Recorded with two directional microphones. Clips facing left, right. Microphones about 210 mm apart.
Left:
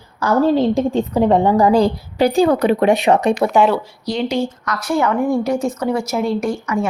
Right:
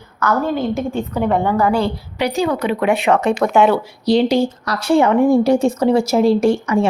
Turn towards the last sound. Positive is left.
turn(degrees=-30)  # may be behind; listen again after turning